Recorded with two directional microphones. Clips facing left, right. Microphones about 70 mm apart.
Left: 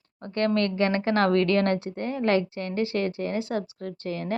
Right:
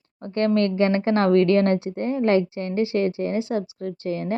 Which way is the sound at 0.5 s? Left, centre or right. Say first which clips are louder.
Right 4 dB; right.